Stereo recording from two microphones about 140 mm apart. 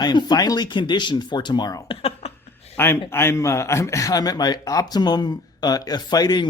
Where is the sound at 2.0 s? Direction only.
45° left (ahead or behind).